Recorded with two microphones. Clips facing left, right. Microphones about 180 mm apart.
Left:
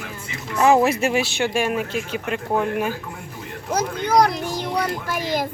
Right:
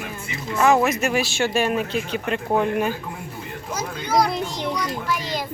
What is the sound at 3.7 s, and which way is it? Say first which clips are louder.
A child's voice: left 3 dB; 60° left (ahead or behind).